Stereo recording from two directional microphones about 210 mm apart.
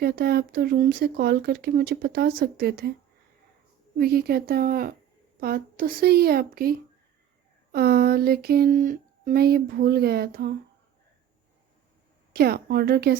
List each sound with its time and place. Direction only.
0.0 s speech: 50° right (ahead or behind)
3.9 s speech: 45° right (ahead or behind)
12.3 s speech: 45° right (ahead or behind)